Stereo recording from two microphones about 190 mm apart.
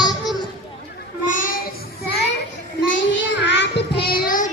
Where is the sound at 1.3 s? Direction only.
45° left (ahead or behind).